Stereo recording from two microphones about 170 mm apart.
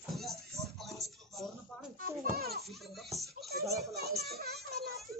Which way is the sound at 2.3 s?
65° right (ahead or behind).